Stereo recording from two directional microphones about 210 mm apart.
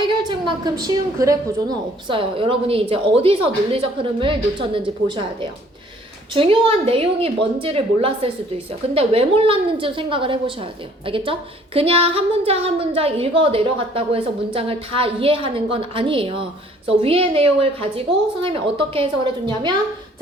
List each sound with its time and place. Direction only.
0.1 s a woman's voice: 20° right (ahead or behind)